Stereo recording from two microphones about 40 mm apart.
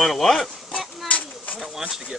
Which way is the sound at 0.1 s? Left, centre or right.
Centre.